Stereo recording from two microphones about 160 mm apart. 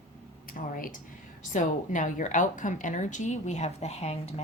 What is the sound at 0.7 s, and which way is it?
A woman's voice, 60° left (ahead or behind).